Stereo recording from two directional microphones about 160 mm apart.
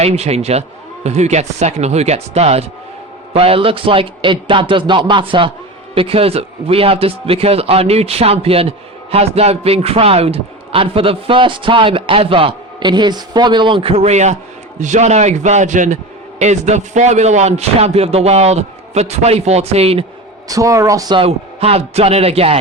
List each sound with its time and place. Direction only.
0.0 s a man's voice: 40° right (ahead or behind)
20.5 s speech: 20° right (ahead or behind)
21.2 s speech: 40° right (ahead or behind)